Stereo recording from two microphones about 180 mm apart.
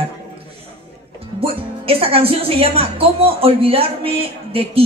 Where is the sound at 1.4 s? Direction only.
30° right (ahead or behind).